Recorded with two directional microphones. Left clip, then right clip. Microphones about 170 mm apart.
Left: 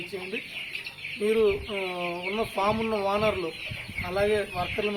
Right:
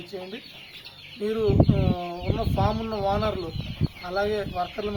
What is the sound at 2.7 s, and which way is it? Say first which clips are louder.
Speech: even; 25° right (ahead or behind).